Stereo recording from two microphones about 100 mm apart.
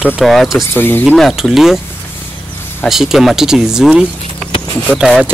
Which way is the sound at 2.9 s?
5° right (ahead or behind).